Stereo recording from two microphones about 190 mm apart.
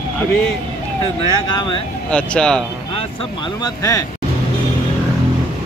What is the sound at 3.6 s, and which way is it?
Speech, 15° left (ahead or behind).